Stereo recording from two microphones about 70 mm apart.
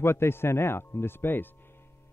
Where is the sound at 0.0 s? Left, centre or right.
Left.